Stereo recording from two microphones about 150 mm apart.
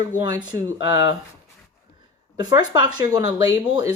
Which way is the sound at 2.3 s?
25° right (ahead or behind).